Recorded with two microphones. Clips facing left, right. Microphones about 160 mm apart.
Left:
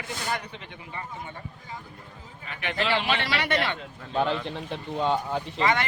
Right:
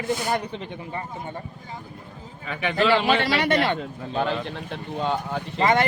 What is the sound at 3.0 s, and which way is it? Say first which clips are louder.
Speech: right 6 dB; 40° right (ahead or behind).